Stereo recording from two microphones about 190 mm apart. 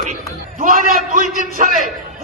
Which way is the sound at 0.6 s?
45° right (ahead or behind).